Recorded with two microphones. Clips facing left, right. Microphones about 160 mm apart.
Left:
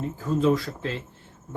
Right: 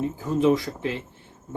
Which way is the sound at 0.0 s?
15° right (ahead or behind).